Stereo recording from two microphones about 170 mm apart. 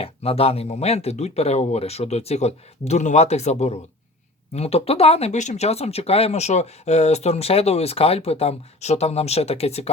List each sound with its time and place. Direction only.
0.0 s speech: 35° left (ahead or behind)